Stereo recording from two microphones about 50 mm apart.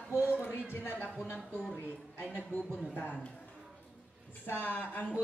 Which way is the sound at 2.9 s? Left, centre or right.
Left.